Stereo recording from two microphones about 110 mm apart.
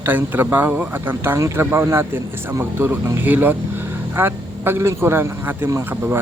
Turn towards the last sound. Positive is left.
turn(degrees=-20)  # may be behind; listen again after turning